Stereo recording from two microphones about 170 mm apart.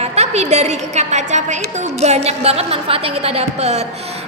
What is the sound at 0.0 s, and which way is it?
A woman's voice, 40° right (ahead or behind).